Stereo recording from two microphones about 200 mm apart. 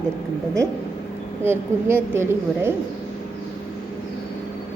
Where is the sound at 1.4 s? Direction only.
10° right (ahead or behind).